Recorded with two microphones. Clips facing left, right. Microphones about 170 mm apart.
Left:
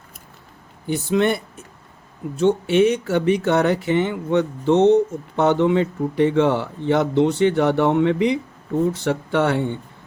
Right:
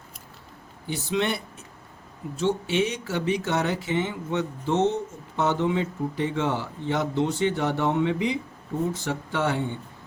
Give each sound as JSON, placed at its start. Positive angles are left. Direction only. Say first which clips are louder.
{"t": 0.9, "sound": "a man's voice", "louder": "left 7 dB", "side_deg": 50}